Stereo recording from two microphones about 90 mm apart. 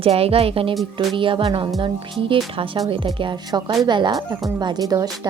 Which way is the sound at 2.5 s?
85° right.